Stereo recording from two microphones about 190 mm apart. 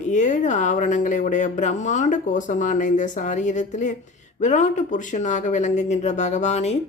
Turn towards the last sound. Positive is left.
turn(degrees=35)  # may be behind; listen again after turning